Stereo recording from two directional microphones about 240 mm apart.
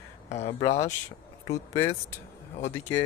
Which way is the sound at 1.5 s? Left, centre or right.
Centre.